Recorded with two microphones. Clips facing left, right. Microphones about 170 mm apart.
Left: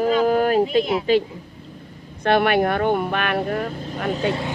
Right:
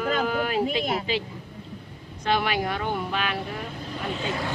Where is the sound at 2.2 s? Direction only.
60° left (ahead or behind).